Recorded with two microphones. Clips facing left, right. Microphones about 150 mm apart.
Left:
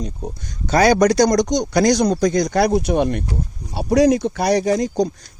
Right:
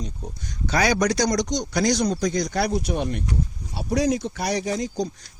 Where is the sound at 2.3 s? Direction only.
75° left (ahead or behind).